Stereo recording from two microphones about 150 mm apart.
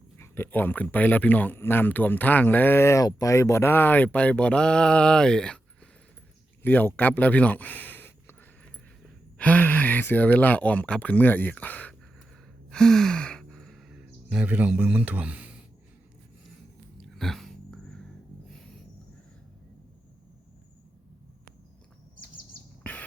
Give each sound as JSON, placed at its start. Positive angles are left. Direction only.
{"t": 0.2, "sound": "speech", "side_deg": 15}
{"t": 12.7, "sound": "sigh", "side_deg": 5}
{"t": 17.0, "sound": "a sound", "side_deg": 0}
{"t": 22.8, "sound": "beatboxing", "side_deg": 10}